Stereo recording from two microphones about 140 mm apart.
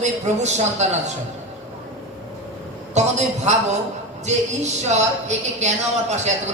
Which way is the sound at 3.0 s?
55° right (ahead or behind).